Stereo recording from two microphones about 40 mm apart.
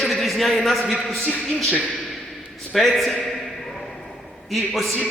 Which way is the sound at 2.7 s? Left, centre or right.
Centre.